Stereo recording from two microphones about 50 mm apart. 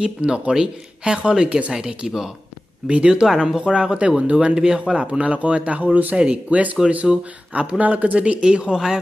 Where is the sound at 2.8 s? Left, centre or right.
Right.